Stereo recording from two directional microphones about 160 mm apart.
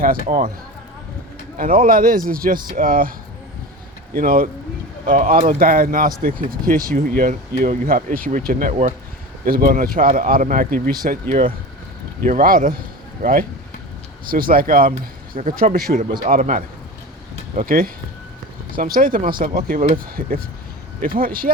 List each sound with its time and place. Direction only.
0.3 s speech: 60° right (ahead or behind)
1.5 s speech: 60° right (ahead or behind)
4.1 s speech: 65° right (ahead or behind)
12.2 s speech: 60° right (ahead or behind)
14.3 s speech: 65° right (ahead or behind)
15.9 s speech: 45° right (ahead or behind); by 21.5 s 65° right (ahead or behind)